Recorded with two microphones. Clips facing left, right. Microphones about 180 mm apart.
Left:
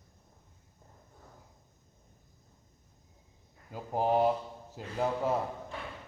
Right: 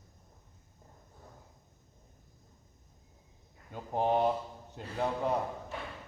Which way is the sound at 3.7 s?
5° left (ahead or behind).